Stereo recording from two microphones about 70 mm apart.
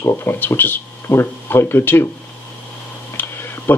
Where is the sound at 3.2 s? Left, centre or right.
Left.